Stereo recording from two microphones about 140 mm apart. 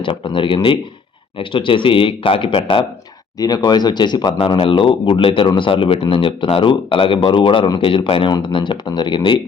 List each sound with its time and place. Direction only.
0.0 s speech: 40° left (ahead or behind)
3.3 s speech: 30° left (ahead or behind)